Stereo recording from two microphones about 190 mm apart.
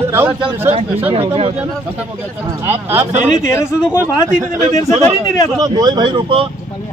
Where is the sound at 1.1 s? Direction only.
30° right (ahead or behind).